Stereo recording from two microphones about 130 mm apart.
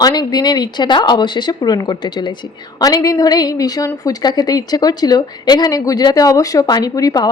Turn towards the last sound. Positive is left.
turn(degrees=30)  # may be behind; listen again after turning